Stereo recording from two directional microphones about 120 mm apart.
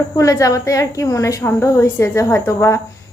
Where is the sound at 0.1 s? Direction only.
25° left (ahead or behind).